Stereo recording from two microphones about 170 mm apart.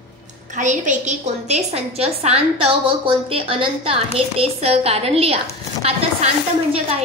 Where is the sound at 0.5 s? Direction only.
45° right (ahead or behind).